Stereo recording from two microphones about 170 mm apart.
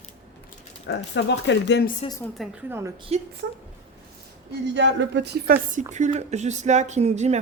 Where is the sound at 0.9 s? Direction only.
90° left.